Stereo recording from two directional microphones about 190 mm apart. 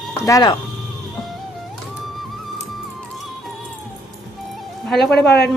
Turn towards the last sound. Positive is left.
turn(degrees=60)  # may be behind; listen again after turning